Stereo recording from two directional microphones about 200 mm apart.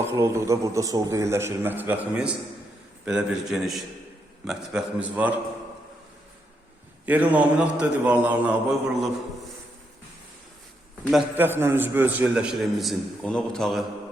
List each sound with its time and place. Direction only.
0.0 s a man's voice: 15° right (ahead or behind)
7.0 s a man's voice: 10° right (ahead or behind)
11.0 s a man's voice: 10° right (ahead or behind)